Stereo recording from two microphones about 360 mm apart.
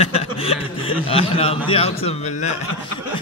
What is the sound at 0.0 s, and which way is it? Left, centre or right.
Chuckle, centre.